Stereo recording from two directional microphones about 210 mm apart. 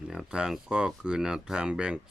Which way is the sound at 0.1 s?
5° right (ahead or behind).